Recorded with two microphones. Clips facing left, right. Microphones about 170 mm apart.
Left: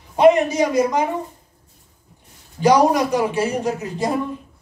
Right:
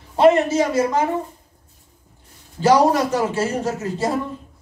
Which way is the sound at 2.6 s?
15° left (ahead or behind).